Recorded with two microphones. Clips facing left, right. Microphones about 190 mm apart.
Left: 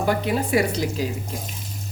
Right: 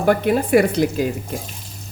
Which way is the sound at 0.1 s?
55° right (ahead or behind).